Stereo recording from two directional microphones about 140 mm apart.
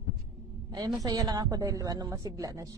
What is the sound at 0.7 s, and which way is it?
Speech, 25° right (ahead or behind).